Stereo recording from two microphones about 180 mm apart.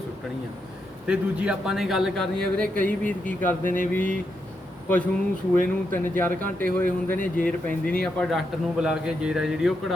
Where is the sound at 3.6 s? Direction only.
50° left (ahead or behind).